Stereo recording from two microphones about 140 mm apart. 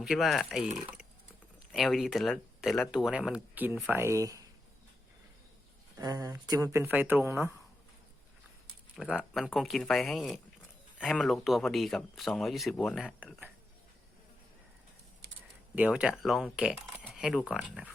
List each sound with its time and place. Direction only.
0.0 s speech: centre (ahead or behind); by 4.4 s 25° right (ahead or behind)
6.0 s speech: 25° right (ahead or behind)
9.0 s speech: 5° left (ahead or behind)
13.1 s speech: 10° right (ahead or behind)
15.7 s speech: 10° right (ahead or behind)